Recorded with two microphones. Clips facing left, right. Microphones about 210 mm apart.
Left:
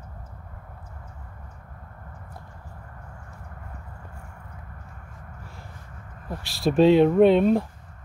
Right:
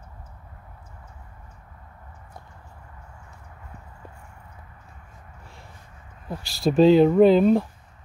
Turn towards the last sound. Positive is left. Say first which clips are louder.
# right 1 dB
turn(degrees=0)  # may be behind; listen again after turning